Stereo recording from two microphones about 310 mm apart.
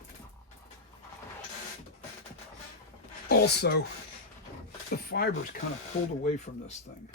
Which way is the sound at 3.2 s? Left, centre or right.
Left.